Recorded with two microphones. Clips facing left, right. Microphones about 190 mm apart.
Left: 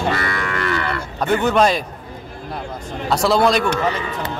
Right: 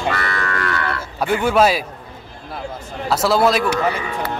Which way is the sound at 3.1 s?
5° right (ahead or behind).